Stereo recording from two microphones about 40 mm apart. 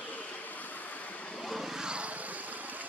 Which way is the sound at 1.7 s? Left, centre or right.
Right.